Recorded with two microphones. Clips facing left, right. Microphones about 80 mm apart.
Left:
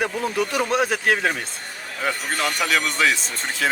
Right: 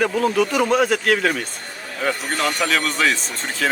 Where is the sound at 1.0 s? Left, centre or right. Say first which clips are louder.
Right 2 dB; centre.